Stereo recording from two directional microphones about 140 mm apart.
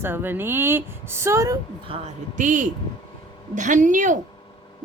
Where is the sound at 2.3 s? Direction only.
70° right (ahead or behind).